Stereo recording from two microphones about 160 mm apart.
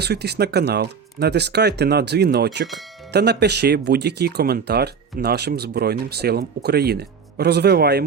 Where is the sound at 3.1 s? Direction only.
90° right.